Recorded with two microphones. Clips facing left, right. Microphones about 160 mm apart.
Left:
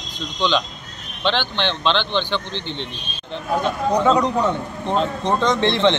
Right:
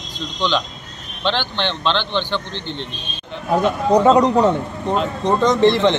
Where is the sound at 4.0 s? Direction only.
40° right (ahead or behind).